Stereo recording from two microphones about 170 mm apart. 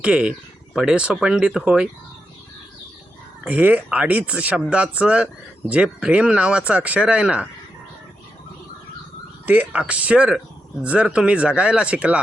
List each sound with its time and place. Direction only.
0.0 s speech: 5° right (ahead or behind)
3.4 s speech: 10° right (ahead or behind)
9.5 s speech: 10° right (ahead or behind)